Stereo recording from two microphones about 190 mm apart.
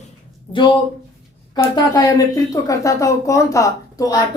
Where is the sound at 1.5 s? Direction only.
20° left (ahead or behind).